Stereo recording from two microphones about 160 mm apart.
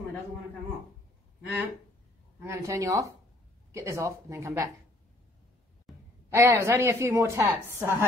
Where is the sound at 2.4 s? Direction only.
15° right (ahead or behind).